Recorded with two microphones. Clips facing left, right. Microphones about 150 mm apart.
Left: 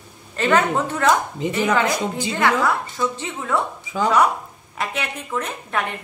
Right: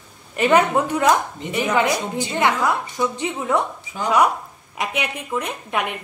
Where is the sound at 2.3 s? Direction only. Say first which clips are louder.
Even; 20° right (ahead or behind).